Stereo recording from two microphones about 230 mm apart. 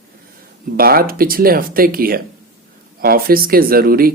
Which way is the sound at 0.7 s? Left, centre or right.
Right.